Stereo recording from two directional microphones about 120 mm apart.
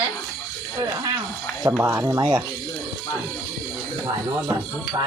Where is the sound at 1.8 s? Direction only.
20° right (ahead or behind).